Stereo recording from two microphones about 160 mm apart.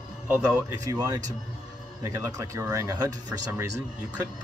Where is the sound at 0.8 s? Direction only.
25° right (ahead or behind).